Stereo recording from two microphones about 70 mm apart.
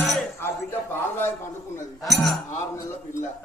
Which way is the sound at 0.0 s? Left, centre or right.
Centre.